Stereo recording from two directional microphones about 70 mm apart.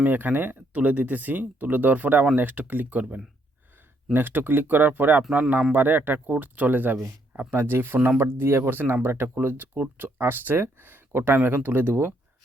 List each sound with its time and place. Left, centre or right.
0.0 s speech: right